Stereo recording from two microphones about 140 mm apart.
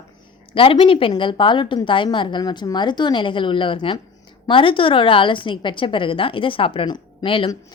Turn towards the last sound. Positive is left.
turn(degrees=40)  # may be behind; listen again after turning